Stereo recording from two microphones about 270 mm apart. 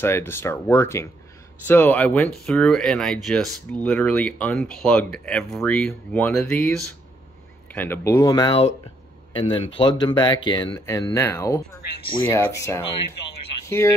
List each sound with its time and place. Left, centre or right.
0.0 s speech: centre
7.7 s speech: centre
13.7 s speech: centre